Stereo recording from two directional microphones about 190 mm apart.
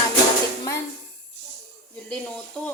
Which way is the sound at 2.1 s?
5° left (ahead or behind).